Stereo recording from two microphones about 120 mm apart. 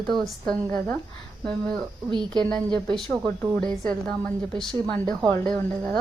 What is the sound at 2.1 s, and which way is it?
Speech, 35° right (ahead or behind).